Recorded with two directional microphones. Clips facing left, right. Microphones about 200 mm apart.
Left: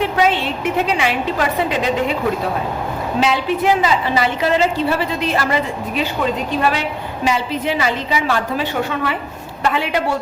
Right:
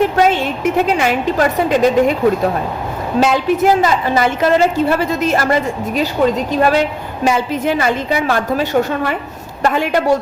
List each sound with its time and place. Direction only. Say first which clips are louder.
0.0 s a woman's voice: right 4 dB; 45° right (ahead or behind)
3.2 s a woman's voice: right 5 dB; 45° right (ahead or behind)